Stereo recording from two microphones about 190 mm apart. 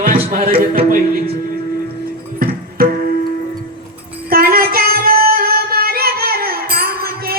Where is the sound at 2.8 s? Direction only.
50° right (ahead or behind).